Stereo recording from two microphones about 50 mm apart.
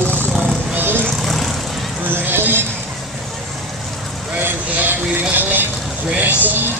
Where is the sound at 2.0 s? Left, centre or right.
Right.